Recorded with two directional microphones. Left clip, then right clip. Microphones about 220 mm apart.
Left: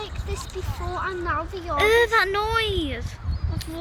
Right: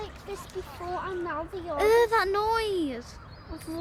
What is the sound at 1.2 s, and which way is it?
Speech, 25° right (ahead or behind).